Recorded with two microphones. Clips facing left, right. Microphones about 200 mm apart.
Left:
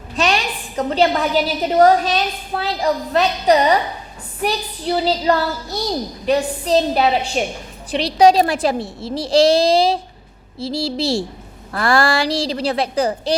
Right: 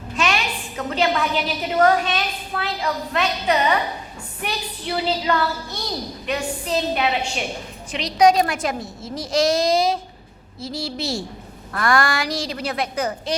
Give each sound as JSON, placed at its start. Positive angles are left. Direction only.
{"t": 0.2, "sound": "a woman's voice", "side_deg": 35}